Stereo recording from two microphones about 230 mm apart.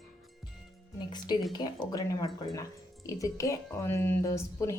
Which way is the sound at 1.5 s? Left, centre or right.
Centre.